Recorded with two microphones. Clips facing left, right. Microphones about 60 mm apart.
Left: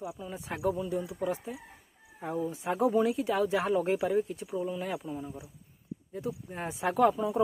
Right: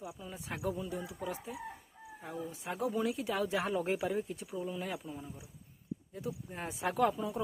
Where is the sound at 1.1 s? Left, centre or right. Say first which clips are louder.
Left 7 dB; left.